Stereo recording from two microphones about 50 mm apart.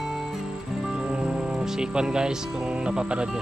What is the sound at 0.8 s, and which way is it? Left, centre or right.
Speech, centre.